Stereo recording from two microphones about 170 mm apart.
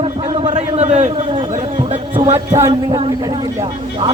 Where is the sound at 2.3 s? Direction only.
15° right (ahead or behind).